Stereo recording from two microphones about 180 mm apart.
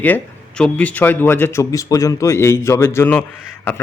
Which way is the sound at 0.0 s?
5° left (ahead or behind).